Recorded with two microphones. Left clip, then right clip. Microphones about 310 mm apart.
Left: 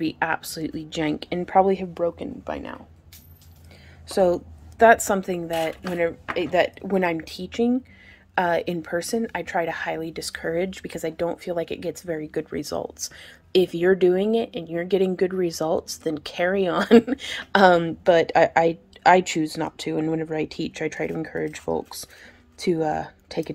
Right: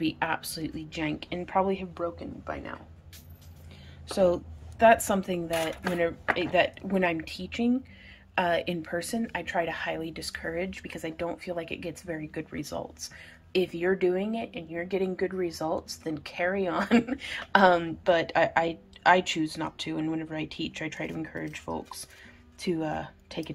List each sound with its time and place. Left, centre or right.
0.0 s speech: centre
4.1 s speech: centre